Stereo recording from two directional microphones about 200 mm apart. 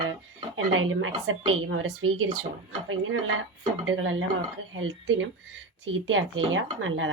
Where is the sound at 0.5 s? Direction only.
85° right.